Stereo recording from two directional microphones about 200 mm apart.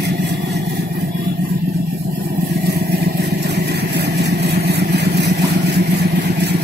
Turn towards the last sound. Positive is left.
turn(degrees=-55)  # may be behind; listen again after turning